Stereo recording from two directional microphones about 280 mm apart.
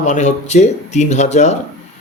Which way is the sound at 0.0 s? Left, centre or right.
Left.